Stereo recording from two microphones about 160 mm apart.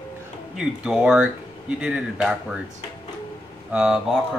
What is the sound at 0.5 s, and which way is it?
Speech, 5° right (ahead or behind).